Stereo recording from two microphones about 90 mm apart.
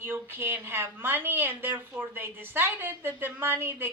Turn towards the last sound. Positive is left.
turn(degrees=-25)  # may be behind; listen again after turning